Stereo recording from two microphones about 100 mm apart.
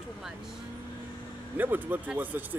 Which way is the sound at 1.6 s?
20° right (ahead or behind).